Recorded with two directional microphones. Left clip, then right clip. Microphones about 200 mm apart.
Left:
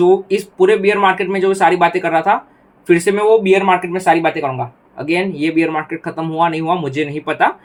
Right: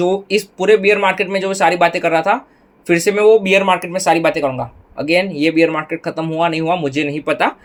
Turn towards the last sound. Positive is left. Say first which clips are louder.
# left 1 dB
turn(degrees=-40)  # may be behind; listen again after turning